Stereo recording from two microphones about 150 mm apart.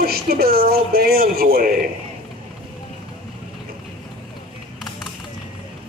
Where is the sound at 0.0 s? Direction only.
90° right.